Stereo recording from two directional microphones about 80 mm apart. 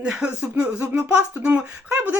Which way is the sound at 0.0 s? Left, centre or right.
Centre.